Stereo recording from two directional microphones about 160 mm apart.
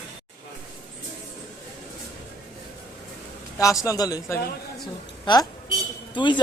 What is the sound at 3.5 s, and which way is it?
Speech, 20° left (ahead or behind).